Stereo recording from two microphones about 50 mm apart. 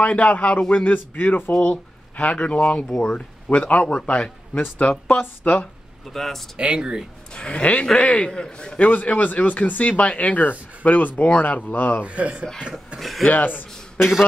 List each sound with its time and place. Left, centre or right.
0.0 s a man's voice: left
1.6 s a man's voice: left
5.2 s speech: left
6.1 s speech: centre
6.6 s speech: centre
7.3 s a man's voice: centre
8.3 s a man's voice: centre
8.7 s speech: left
12.0 s speech: right
13.0 s speech: centre
13.3 s speech: left